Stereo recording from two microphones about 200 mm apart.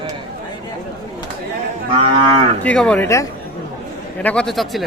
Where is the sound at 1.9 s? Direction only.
25° right (ahead or behind).